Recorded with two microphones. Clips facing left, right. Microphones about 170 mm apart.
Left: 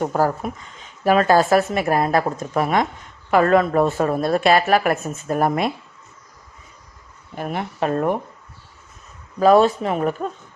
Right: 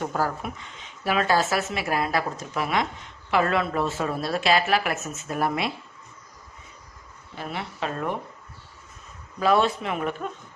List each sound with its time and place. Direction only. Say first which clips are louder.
0.0 s speech: left 7 dB; 40° left (ahead or behind)
7.3 s speech: left 7 dB; 50° left (ahead or behind)
9.4 s a man's voice: left 7 dB; 40° left (ahead or behind)